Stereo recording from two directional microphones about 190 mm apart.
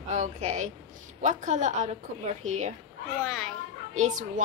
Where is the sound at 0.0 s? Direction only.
35° right (ahead or behind).